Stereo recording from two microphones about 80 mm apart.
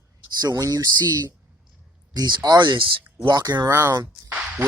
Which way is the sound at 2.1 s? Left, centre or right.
Right.